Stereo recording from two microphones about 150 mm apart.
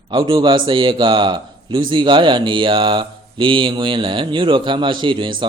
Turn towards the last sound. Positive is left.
turn(degrees=-30)  # may be behind; listen again after turning